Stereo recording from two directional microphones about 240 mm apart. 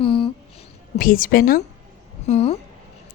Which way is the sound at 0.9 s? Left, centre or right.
Left.